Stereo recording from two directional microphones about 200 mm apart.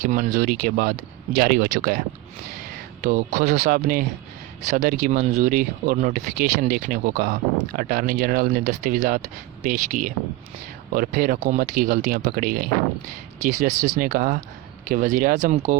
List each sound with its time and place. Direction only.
0.0 s speech: 45° right (ahead or behind)
3.0 s speech: 40° right (ahead or behind)
13.4 s speech: 35° right (ahead or behind)